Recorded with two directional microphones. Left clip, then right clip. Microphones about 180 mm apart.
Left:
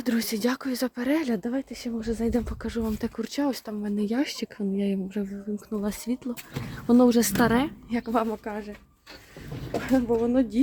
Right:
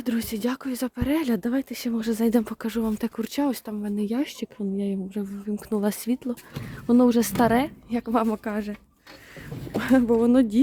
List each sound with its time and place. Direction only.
0.0 s speech: 5° right (ahead or behind)
1.4 s speech: 30° right (ahead or behind); by 5.2 s 5° right (ahead or behind)
5.5 s speech: 40° right (ahead or behind)
5.8 s speech: 20° right (ahead or behind)
9.8 s speech: 45° right (ahead or behind)